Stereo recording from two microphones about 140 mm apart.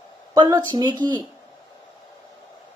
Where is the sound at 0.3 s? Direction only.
30° right (ahead or behind).